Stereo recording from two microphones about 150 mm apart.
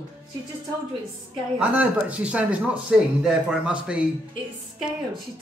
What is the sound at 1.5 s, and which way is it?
Speech, 10° right (ahead or behind).